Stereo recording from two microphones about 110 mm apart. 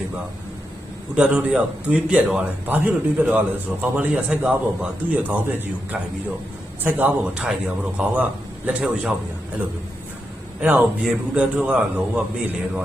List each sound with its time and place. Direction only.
1.1 s a man's voice: 10° right (ahead or behind)
10.6 s a man's voice: 15° right (ahead or behind)